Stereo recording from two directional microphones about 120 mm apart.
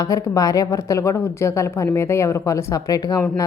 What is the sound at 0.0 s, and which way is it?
Speech, 30° left (ahead or behind).